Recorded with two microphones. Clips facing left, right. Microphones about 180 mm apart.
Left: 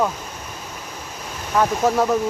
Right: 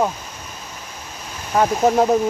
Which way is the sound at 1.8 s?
20° right (ahead or behind).